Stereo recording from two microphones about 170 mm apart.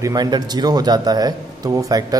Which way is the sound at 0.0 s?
25° right (ahead or behind).